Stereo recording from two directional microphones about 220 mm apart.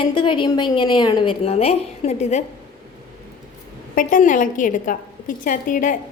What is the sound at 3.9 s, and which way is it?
A woman's voice, 35° left (ahead or behind).